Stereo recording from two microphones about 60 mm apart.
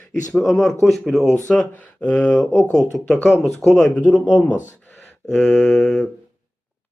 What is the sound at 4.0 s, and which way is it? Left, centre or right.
Speech, left.